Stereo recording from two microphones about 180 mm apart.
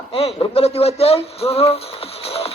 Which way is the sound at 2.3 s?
35° left (ahead or behind).